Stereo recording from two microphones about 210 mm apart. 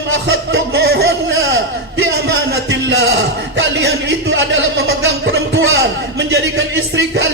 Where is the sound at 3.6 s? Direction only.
55° right (ahead or behind).